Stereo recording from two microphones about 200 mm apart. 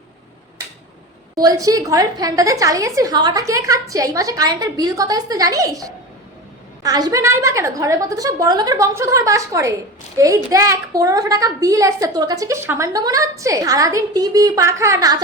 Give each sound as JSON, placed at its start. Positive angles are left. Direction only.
{"t": 1.4, "sound": "a child's voice", "side_deg": -20}